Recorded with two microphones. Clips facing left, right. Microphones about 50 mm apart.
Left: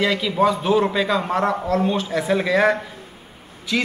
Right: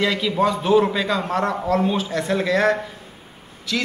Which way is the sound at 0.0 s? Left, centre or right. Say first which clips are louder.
Left 1 dB; centre.